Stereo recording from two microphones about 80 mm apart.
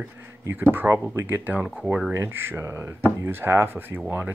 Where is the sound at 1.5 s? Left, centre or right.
Centre.